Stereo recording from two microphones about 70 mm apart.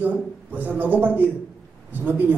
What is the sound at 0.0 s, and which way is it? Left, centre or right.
A man's voice, right.